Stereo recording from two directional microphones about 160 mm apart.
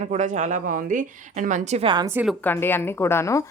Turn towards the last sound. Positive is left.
turn(degrees=15)  # may be behind; listen again after turning